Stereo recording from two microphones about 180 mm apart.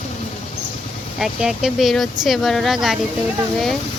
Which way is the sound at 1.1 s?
Centre (ahead or behind).